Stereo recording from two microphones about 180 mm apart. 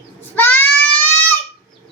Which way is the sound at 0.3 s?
10° left (ahead or behind).